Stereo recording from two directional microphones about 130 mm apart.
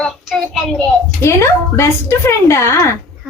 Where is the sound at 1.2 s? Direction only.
20° left (ahead or behind).